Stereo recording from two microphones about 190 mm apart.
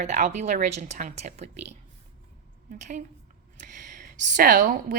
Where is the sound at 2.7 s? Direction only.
45° right (ahead or behind).